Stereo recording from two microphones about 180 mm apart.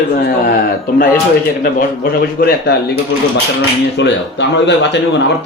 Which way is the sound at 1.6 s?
60° left (ahead or behind).